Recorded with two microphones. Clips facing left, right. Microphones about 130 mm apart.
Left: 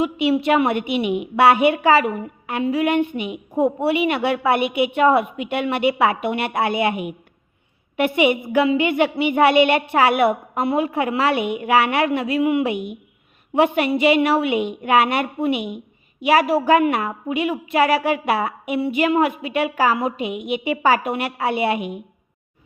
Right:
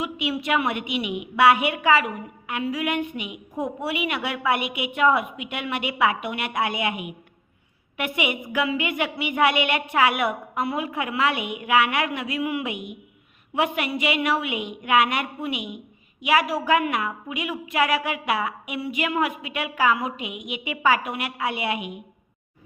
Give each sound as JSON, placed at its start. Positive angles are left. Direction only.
{"t": 0.0, "sound": "a woman's voice", "side_deg": 30}